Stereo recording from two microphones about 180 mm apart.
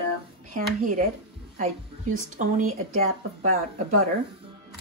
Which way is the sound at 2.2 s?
45° right (ahead or behind).